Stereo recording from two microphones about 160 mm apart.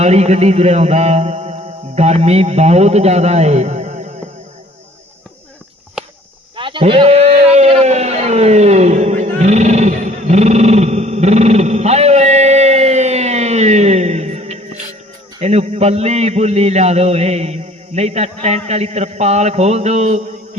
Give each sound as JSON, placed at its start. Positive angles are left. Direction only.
{"t": 0.0, "sound": "music", "side_deg": -45}
{"t": 6.6, "sound": "a sound", "side_deg": -30}
{"t": 15.4, "sound": "a man's voice", "side_deg": -40}